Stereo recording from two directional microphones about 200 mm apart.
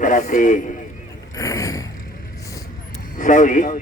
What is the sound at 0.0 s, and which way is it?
Speech, 40° left (ahead or behind).